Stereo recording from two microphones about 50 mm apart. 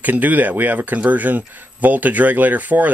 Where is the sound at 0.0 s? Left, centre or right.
Right.